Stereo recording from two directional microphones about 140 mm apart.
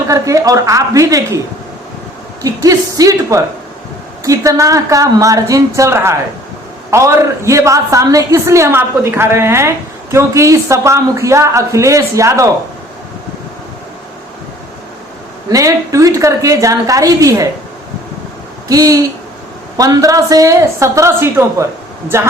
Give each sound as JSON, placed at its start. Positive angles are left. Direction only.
{"t": 0.1, "sound": "a woman's voice", "side_deg": -25}
{"t": 2.4, "sound": "a woman's voice", "side_deg": -25}
{"t": 15.4, "sound": "a woman's voice", "side_deg": -25}
{"t": 18.7, "sound": "a woman's voice", "side_deg": -25}